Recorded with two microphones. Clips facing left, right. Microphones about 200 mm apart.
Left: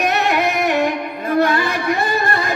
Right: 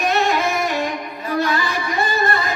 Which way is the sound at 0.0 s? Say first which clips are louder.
Left 1 dB; 65° left (ahead or behind).